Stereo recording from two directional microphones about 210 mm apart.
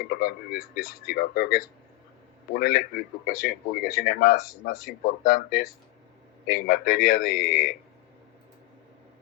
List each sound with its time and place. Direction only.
0.0 s speech: 45° left (ahead or behind)